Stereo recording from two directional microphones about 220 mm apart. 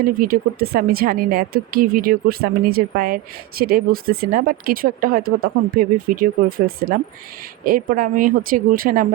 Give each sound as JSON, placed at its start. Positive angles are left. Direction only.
{"t": 0.0, "sound": "speech", "side_deg": -40}